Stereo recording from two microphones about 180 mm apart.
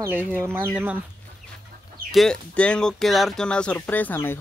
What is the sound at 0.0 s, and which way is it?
Speech, 10° right (ahead or behind).